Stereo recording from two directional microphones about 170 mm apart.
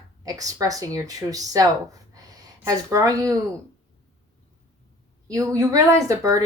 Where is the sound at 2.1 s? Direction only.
20° right (ahead or behind).